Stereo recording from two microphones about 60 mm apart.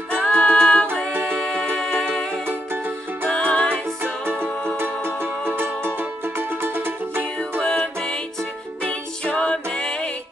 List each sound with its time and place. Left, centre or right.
0.1 s music: centre
2.4 s music: right
3.3 s music: centre
4.7 s music: right
7.6 s music: centre